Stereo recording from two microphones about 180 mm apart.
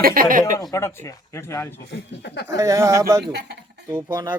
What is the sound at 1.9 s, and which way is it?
Speech, 70° left (ahead or behind).